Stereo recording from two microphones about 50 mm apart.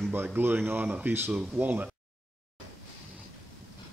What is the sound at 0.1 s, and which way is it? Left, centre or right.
Speech, right.